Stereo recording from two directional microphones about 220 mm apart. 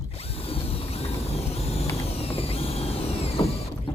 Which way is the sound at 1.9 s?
25° left (ahead or behind).